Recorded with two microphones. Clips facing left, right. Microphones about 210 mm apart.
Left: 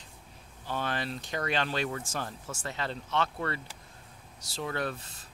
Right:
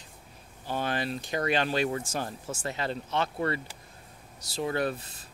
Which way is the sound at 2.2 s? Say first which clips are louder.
Right 4 dB; 25° right (ahead or behind).